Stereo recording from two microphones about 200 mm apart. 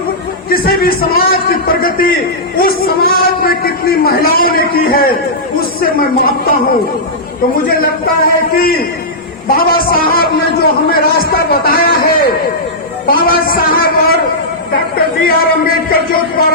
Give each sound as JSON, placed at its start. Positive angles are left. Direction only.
{"t": 0.5, "sound": "a man's voice", "side_deg": 50}
{"t": 7.5, "sound": "a man's voice", "side_deg": 50}